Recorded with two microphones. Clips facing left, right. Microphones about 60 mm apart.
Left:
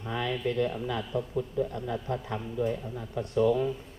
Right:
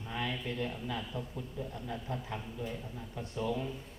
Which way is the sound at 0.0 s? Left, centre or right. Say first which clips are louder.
Left 7 dB; left.